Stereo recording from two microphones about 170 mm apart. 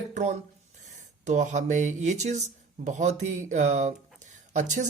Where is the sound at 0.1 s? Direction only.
45° right (ahead or behind).